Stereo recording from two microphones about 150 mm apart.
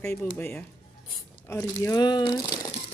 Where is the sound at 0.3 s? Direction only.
10° left (ahead or behind); by 2.4 s 30° left (ahead or behind).